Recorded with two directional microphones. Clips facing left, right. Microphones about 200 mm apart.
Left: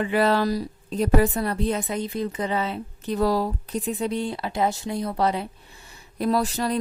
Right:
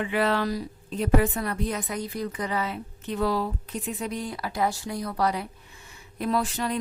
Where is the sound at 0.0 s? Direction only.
35° left (ahead or behind).